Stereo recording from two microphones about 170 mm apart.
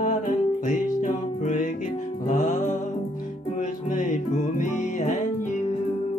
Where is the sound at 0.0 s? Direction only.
50° left (ahead or behind).